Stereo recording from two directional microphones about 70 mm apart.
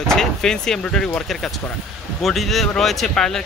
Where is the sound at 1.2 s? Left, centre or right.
Centre.